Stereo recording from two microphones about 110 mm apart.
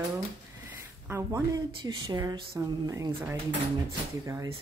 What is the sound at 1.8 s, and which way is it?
Speech, 40° right (ahead or behind).